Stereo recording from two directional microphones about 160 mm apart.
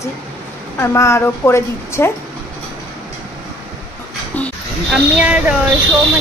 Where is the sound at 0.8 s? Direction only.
15° left (ahead or behind).